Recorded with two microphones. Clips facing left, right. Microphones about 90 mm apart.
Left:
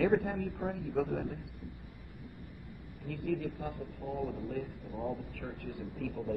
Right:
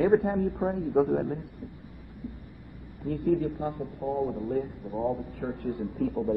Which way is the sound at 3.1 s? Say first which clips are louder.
Right 9 dB; 35° right (ahead or behind).